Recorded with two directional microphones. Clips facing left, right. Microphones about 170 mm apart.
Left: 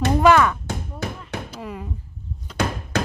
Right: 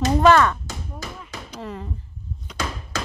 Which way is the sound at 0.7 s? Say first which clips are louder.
Left 5 dB; 60° left (ahead or behind).